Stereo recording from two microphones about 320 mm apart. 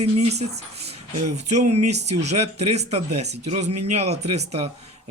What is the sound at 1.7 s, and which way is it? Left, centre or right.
Speech, right.